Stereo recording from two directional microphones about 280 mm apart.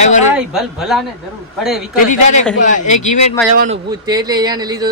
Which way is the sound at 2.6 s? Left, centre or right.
Left.